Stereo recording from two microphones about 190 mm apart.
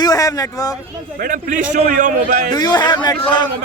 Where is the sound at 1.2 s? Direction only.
45° right (ahead or behind).